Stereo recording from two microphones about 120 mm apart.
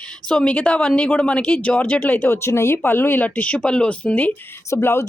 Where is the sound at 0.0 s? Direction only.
5° left (ahead or behind).